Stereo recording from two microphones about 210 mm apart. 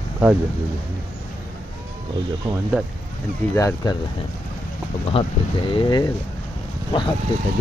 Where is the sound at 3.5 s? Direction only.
10° left (ahead or behind).